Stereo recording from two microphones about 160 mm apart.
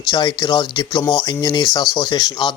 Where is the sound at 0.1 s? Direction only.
30° left (ahead or behind).